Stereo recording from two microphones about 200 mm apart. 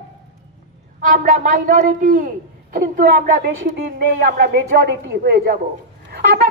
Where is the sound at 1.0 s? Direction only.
40° right (ahead or behind).